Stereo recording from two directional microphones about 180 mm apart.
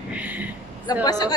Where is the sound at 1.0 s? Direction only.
20° left (ahead or behind).